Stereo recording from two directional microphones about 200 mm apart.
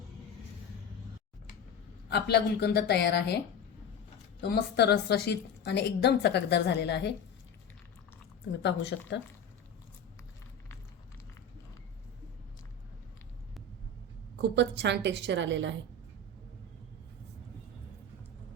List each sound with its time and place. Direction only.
2.0 s a woman's voice: 55° left (ahead or behind)
8.6 s a woman's voice: 60° left (ahead or behind)
14.5 s a woman's voice: 60° right (ahead or behind)